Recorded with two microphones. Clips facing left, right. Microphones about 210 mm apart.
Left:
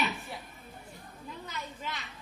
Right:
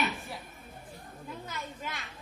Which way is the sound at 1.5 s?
50° right (ahead or behind).